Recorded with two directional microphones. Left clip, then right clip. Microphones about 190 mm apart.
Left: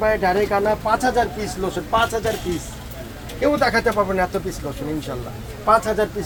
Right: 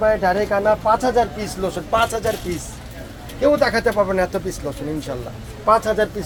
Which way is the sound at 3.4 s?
25° right (ahead or behind).